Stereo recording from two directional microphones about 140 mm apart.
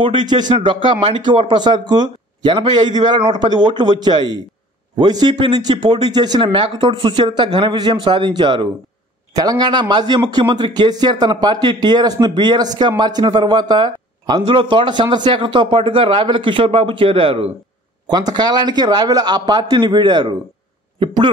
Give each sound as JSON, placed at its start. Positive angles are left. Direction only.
{"t": 0.0, "sound": "a man's voice", "side_deg": -35}
{"t": 18.0, "sound": "a man's voice", "side_deg": -30}